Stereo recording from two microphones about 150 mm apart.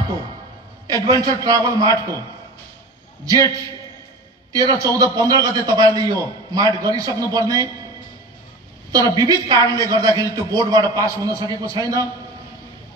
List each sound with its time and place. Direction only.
1.0 s a man's voice: 25° right (ahead or behind)
3.3 s a man's voice: 25° right (ahead or behind)
8.9 s a man's voice: 25° right (ahead or behind)